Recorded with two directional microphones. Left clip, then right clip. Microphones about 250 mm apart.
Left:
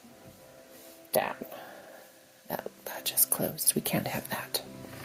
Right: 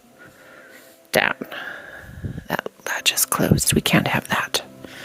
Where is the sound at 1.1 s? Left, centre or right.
Right.